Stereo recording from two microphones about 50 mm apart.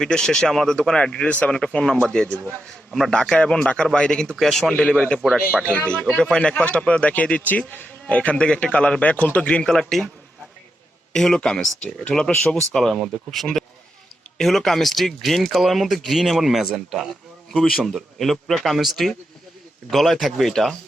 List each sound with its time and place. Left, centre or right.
0.0 s speech: centre
2.6 s a man's voice: centre
3.1 s speech: centre
4.9 s speech: left
9.6 s speech: centre
11.1 s a man's voice: centre
11.3 s speech: left; by 20.7 s centre